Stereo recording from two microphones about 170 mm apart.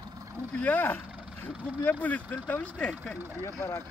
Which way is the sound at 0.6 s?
10° left (ahead or behind).